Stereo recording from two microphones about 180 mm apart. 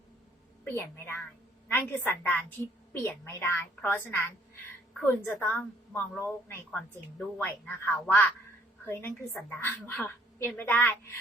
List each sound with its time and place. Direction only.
0.6 s a woman's voice: 10° left (ahead or behind)